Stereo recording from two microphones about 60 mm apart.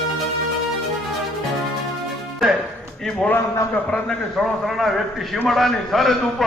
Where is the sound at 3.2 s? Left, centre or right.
Centre.